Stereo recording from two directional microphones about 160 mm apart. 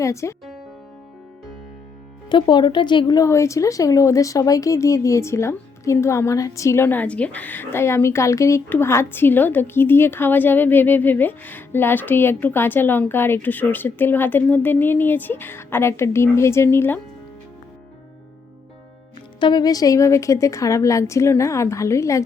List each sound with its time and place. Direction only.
0.0 s speech: 20° left (ahead or behind)
2.3 s speech: 30° left (ahead or behind); by 17.0 s 15° left (ahead or behind)
19.4 s a woman's voice: 30° left (ahead or behind)